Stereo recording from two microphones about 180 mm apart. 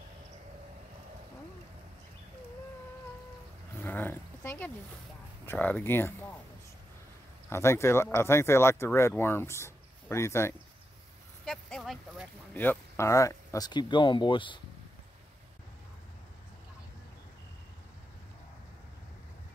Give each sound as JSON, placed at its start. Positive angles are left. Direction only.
{"t": 3.8, "sound": "roaring cats", "side_deg": 10}
{"t": 5.4, "sound": "speech", "side_deg": 10}
{"t": 7.4, "sound": "speech", "side_deg": 15}
{"t": 11.4, "sound": "a sound", "side_deg": 5}
{"t": 12.5, "sound": "speech", "side_deg": 10}